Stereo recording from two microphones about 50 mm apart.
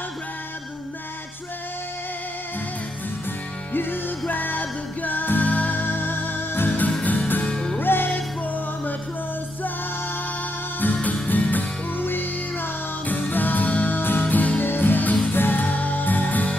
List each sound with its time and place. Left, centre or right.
3.7 s music: left
7.4 s music: centre
7.8 s music: left
10.8 s music: left
13.9 s music: left
14.2 s music: left